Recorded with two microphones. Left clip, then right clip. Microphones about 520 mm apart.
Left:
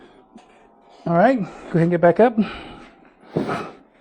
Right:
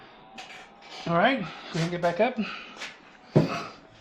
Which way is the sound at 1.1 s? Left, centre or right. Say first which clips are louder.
Left 6 dB; left.